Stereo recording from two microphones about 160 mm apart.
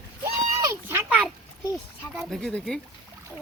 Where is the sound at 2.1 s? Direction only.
Centre (ahead or behind).